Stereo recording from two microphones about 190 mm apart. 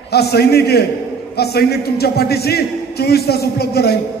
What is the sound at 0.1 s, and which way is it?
A man's voice, 55° left (ahead or behind).